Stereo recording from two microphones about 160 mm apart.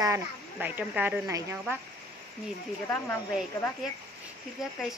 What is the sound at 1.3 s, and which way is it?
Speech, 20° right (ahead or behind).